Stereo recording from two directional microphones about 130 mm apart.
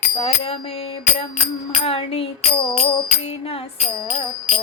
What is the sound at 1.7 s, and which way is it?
Music, 45° left (ahead or behind).